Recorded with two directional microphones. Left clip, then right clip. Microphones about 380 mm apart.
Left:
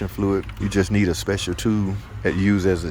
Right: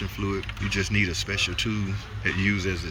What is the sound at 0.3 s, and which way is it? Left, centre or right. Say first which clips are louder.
Speech: left 5 dB; centre.